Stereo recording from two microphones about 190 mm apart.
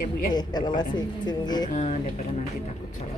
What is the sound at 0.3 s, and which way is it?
Speech, 20° left (ahead or behind).